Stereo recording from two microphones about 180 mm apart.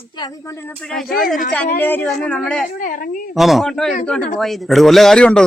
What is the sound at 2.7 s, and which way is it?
Speech, 50° left (ahead or behind).